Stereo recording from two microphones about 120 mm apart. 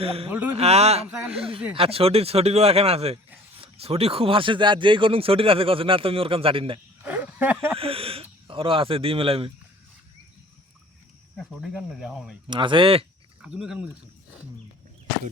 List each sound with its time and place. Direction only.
0.0 s speech: 55° right (ahead or behind)
0.3 s speech: 15° right (ahead or behind)
0.5 s speech: 60° right (ahead or behind)
7.0 s a sound: 15° right (ahead or behind)
7.8 s speech: 50° right (ahead or behind)
11.5 s speech: 5° right (ahead or behind)
12.5 s speech: 45° right (ahead or behind)
13.4 s speech: 5° right (ahead or behind)